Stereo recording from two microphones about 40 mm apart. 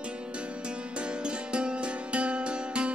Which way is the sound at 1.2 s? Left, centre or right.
Right.